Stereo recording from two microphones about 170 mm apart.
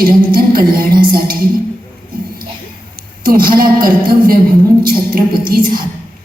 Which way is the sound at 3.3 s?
60° right (ahead or behind).